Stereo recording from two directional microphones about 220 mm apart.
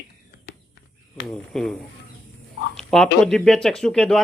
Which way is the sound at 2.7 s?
Centre (ahead or behind).